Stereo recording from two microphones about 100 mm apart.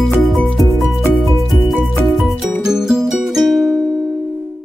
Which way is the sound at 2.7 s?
5° right (ahead or behind).